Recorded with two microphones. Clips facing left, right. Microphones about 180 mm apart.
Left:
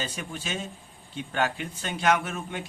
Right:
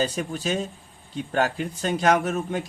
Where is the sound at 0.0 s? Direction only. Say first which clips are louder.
Right 9 dB; 40° right (ahead or behind).